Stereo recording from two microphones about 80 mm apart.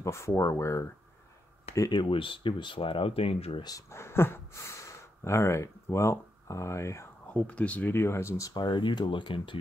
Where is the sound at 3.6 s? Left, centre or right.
Left.